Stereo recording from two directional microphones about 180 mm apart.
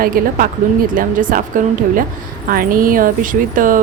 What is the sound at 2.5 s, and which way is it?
A woman's voice, 50° right (ahead or behind).